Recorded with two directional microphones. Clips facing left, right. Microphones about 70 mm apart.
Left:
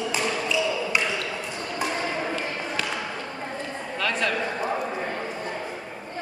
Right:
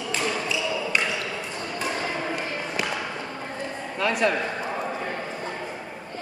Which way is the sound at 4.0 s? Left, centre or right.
Centre.